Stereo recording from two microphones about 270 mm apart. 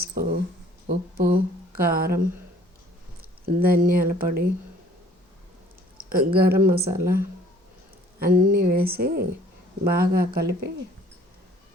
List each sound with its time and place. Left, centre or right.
0.0 s a sound: right
0.9 s speech: right
3.4 s speech: right
6.1 s speech: right
8.2 s speech: right